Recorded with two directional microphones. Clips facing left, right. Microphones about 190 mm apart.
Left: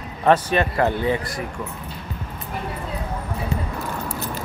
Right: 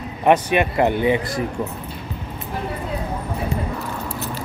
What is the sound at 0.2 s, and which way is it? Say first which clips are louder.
Speech: right 1 dB; 15° right (ahead or behind).